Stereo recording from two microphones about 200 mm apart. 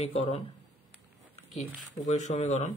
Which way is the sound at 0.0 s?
30° left (ahead or behind).